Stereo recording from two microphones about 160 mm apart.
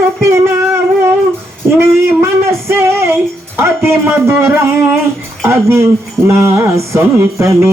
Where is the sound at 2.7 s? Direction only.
15° right (ahead or behind).